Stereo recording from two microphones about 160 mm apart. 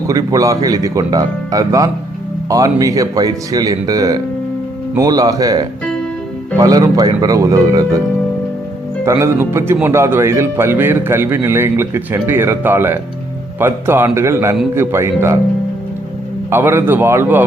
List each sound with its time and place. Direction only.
0.1 s speech: 20° right (ahead or behind)
9.0 s a man's voice: 15° right (ahead or behind)
16.5 s a man's voice: 15° right (ahead or behind)